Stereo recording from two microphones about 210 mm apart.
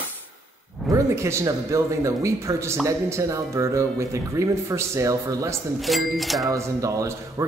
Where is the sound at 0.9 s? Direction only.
15° right (ahead or behind).